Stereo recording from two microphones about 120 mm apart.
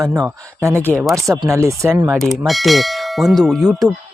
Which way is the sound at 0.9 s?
Centre (ahead or behind).